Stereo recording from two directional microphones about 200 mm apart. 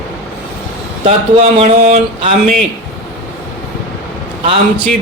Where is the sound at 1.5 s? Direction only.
30° right (ahead or behind).